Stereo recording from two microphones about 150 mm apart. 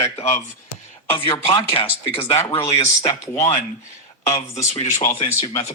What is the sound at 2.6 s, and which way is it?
Speech, 20° left (ahead or behind).